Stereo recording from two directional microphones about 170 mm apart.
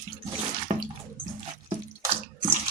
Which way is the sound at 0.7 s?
35° right (ahead or behind).